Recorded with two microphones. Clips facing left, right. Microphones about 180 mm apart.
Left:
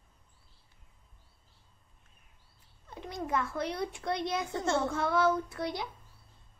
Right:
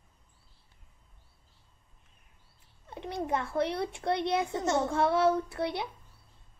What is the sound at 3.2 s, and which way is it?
A child's voice, 30° right (ahead or behind).